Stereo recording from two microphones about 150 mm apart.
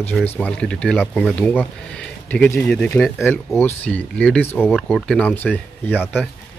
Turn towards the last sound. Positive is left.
turn(degrees=10)  # may be behind; listen again after turning